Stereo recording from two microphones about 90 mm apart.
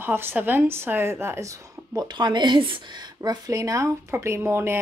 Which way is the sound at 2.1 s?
60° right (ahead or behind).